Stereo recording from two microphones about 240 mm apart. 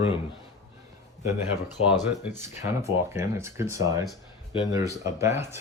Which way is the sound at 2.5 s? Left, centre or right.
Left.